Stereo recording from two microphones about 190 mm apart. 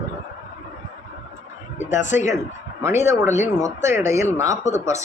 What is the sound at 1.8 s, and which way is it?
Speech, 40° left (ahead or behind).